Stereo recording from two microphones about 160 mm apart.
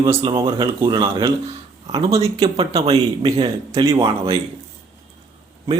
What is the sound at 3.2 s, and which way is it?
Speech, 40° right (ahead or behind).